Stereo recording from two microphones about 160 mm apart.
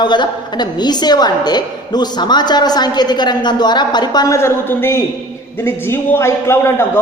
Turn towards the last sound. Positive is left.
turn(degrees=15)  # may be behind; listen again after turning